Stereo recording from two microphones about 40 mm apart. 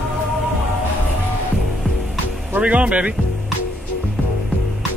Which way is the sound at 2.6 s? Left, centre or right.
Right.